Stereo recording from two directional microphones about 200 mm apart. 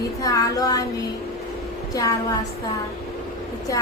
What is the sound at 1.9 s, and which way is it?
Speech, 15° left (ahead or behind).